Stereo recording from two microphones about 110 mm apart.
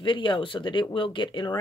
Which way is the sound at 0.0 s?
45° left (ahead or behind).